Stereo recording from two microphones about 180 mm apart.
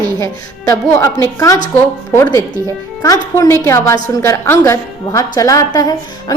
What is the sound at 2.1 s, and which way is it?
A woman's voice, 15° left (ahead or behind).